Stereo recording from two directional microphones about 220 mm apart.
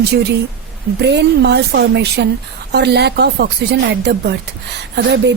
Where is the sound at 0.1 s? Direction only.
50° right (ahead or behind).